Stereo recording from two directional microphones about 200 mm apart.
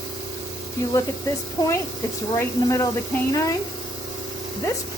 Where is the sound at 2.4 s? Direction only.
15° left (ahead or behind).